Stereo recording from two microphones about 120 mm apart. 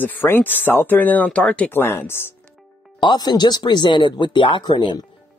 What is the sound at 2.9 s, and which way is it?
Speech, 40° left (ahead or behind).